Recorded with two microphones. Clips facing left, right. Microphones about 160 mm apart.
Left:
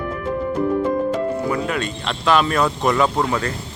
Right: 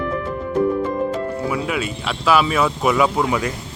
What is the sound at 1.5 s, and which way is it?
Speech, 5° right (ahead or behind).